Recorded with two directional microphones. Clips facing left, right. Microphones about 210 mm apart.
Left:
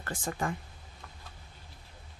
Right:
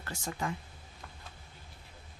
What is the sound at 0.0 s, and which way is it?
Speech, 50° left (ahead or behind).